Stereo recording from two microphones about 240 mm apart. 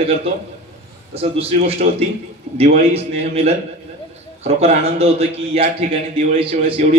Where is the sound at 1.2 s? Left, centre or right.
Right.